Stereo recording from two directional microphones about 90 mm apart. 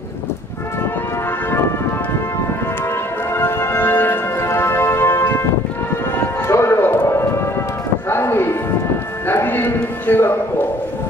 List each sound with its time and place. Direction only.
3.3 s music: 25° left (ahead or behind)
6.4 s music: 30° left (ahead or behind)